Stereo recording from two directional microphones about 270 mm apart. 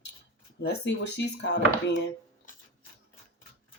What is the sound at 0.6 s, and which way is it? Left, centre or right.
Speech, left.